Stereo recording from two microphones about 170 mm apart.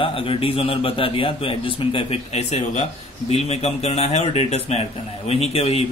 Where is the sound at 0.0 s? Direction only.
30° left (ahead or behind).